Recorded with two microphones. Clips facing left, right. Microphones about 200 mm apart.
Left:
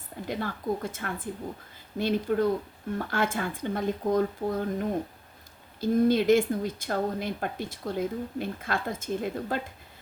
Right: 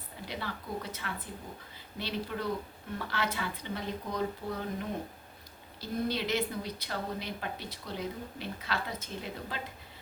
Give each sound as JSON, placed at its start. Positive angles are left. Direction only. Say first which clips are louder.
{"t": 0.3, "sound": "speech", "louder": "left 9 dB", "side_deg": 50}